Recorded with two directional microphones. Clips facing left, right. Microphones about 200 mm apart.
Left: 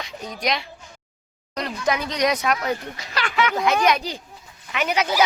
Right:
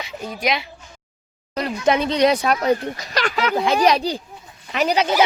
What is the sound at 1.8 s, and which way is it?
Speech, 25° right (ahead or behind).